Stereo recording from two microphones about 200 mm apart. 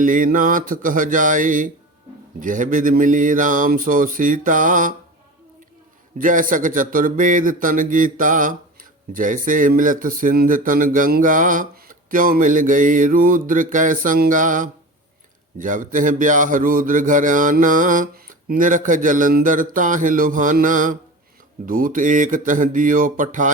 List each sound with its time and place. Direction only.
0.0 s speech: 40° right (ahead or behind)
6.1 s speech: 40° right (ahead or behind)